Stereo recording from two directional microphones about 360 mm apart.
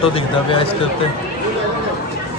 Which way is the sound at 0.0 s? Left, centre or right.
Centre.